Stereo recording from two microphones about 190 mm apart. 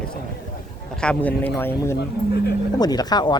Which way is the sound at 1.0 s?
5° left (ahead or behind).